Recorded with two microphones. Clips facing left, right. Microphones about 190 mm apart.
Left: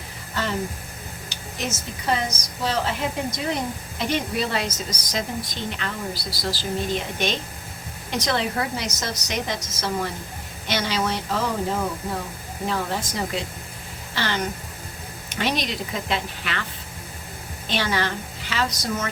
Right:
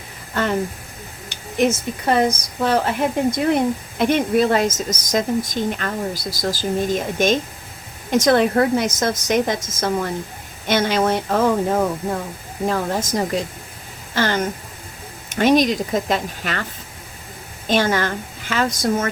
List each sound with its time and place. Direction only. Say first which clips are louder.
0.4 s a woman's voice: right 6 dB; 55° right (ahead or behind)
17.7 s a woman's voice: right 6 dB; 45° right (ahead or behind)